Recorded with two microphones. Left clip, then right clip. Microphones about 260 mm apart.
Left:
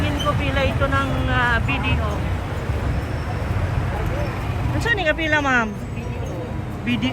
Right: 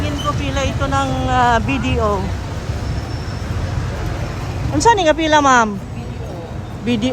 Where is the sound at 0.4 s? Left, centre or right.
Centre.